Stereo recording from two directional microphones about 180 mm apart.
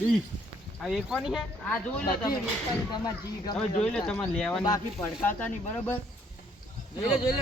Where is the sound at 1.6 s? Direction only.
10° left (ahead or behind).